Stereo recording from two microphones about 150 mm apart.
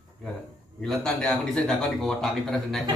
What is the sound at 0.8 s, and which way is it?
A man's voice, 5° left (ahead or behind).